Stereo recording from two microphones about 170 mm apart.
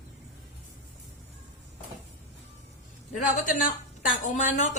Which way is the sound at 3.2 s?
45° left (ahead or behind).